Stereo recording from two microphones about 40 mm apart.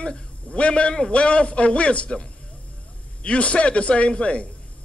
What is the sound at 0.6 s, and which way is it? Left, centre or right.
A man's voice, left.